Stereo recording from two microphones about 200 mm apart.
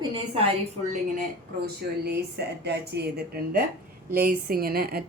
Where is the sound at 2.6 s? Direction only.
55° right (ahead or behind).